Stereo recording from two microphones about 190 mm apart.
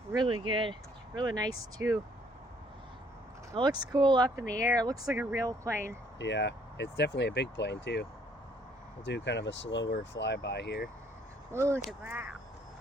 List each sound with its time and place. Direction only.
0.3 s speech: 25° right (ahead or behind)
3.5 s speech: 20° right (ahead or behind)
5.0 s speech: 5° right (ahead or behind)
6.1 s speech: 70° left (ahead or behind)
9.0 s speech: 65° left (ahead or behind)
11.5 s speech: 15° right (ahead or behind)